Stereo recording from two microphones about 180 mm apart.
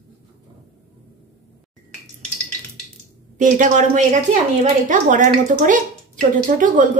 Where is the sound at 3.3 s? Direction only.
45° right (ahead or behind).